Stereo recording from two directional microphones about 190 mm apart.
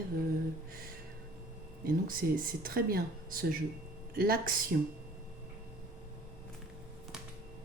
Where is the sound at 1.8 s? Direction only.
50° right (ahead or behind).